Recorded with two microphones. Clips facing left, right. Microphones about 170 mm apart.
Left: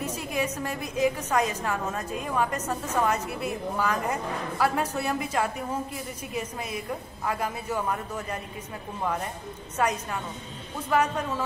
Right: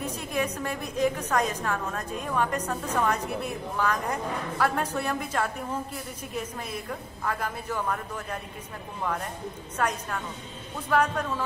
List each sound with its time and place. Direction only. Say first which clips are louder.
0.0 s a woman's voice: even; 10° left (ahead or behind)